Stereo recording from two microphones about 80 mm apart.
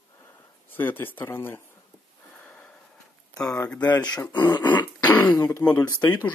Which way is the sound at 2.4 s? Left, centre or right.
Centre.